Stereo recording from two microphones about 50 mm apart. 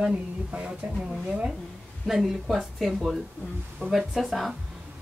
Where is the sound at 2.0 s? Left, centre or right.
Centre.